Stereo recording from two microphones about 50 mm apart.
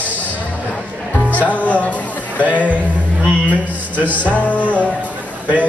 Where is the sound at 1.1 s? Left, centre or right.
Left.